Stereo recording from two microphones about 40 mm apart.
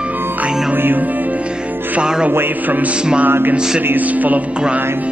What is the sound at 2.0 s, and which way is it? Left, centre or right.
Speech, right.